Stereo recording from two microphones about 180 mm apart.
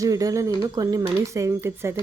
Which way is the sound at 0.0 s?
20° right (ahead or behind).